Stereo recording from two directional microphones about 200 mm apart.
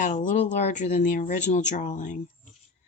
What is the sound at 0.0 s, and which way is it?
Speech, 40° left (ahead or behind).